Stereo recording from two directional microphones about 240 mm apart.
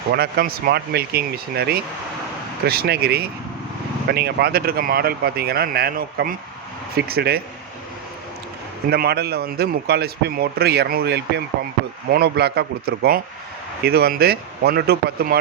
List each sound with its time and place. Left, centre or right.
0.1 s a man's voice: right
8.9 s a man's voice: right